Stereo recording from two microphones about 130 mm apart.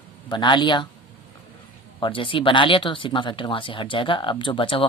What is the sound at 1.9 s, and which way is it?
Speech, 40° left (ahead or behind).